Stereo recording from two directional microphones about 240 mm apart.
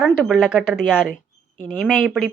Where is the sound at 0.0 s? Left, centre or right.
Centre.